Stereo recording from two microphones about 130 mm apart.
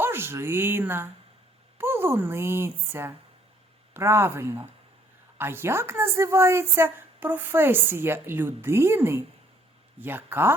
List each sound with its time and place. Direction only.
0.0 s a woman's voice: 20° right (ahead or behind)